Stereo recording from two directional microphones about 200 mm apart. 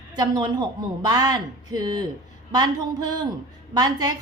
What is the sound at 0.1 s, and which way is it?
A woman's voice, 20° right (ahead or behind).